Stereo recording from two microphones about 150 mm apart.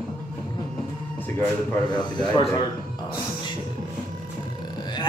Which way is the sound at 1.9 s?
30° left (ahead or behind).